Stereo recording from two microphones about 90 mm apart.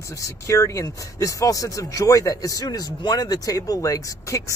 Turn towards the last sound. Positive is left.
turn(degrees=40)  # may be behind; listen again after turning